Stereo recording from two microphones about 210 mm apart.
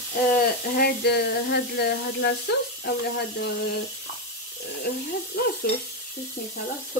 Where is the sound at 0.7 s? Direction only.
50° left (ahead or behind).